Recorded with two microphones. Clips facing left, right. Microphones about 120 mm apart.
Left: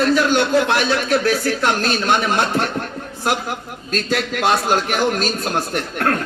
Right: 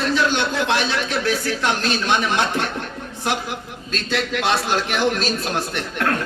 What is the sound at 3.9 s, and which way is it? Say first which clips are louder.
A man's voice: left 2 dB; 45° left (ahead or behind).